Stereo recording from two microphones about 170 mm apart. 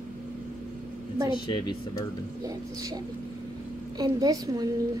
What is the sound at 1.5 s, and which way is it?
Speech, 30° left (ahead or behind).